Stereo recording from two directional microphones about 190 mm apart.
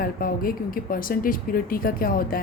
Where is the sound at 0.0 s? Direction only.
50° left (ahead or behind).